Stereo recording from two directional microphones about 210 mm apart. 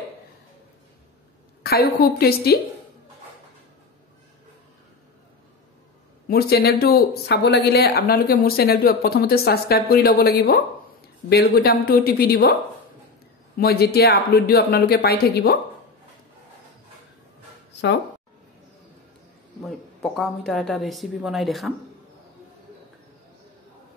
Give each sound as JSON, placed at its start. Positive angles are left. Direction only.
{"t": 1.6, "sound": "speech", "side_deg": 45}
{"t": 6.2, "sound": "speech", "side_deg": 45}
{"t": 13.6, "sound": "speech", "side_deg": 45}
{"t": 17.7, "sound": "speech", "side_deg": 60}
{"t": 19.6, "sound": "speech", "side_deg": 0}